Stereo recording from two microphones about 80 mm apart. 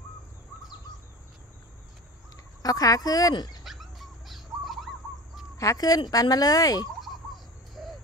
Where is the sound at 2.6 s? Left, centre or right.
Left.